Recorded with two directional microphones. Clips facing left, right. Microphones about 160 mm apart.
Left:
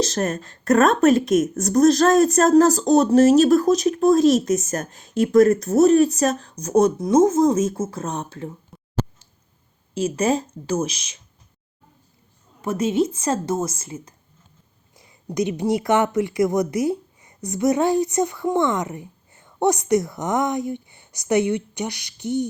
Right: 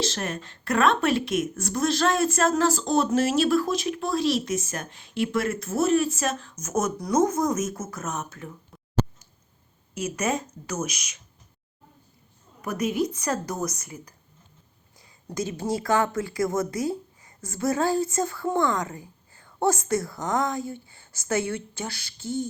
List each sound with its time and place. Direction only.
0.0 s speech: 40° left (ahead or behind)
9.9 s a woman's voice: 30° left (ahead or behind)
12.6 s a woman's voice: 25° left (ahead or behind)
14.9 s a sound: 20° left (ahead or behind)
15.7 s a woman's voice: 20° left (ahead or behind)